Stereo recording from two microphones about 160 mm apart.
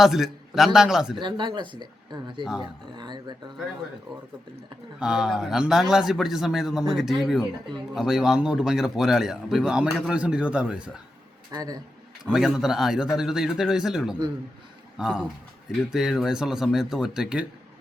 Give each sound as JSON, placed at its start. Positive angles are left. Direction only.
{"t": 0.0, "sound": "speech", "side_deg": 0}
{"t": 1.2, "sound": "speech", "side_deg": -30}
{"t": 2.4, "sound": "speech", "side_deg": -5}
{"t": 2.9, "sound": "speech", "side_deg": -25}
{"t": 4.9, "sound": "speech", "side_deg": -5}
{"t": 11.5, "sound": "speech", "side_deg": -25}
{"t": 12.2, "sound": "speech", "side_deg": -5}